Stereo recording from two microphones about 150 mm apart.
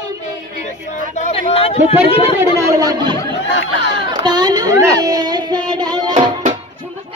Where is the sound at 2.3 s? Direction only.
20° right (ahead or behind).